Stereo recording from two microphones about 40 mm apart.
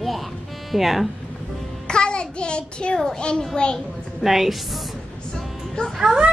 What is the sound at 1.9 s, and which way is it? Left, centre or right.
Child singing, left.